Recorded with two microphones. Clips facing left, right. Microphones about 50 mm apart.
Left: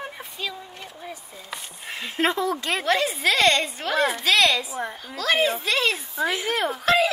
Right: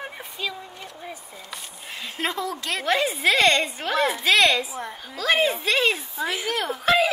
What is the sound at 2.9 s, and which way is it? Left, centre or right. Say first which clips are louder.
A woman's voice: right 1 dB; centre.